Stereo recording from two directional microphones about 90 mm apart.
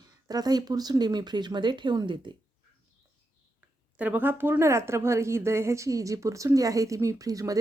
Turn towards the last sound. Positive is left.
turn(degrees=-40)  # may be behind; listen again after turning